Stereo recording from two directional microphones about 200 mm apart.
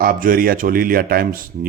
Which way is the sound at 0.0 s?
45° right (ahead or behind).